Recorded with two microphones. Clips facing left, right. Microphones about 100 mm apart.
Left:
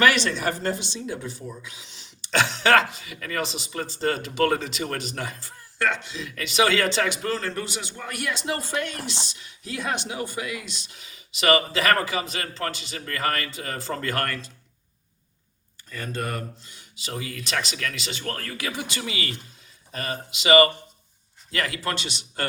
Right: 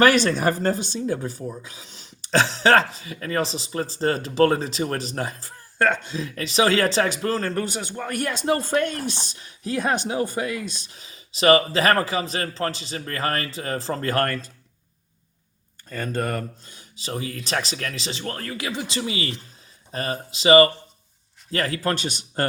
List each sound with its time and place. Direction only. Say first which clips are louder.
0.0 s speech: right 4 dB; 40° right (ahead or behind)
15.9 s speech: right 4 dB; 45° right (ahead or behind)